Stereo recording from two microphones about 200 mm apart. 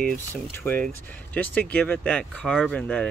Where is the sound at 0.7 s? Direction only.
5° left (ahead or behind).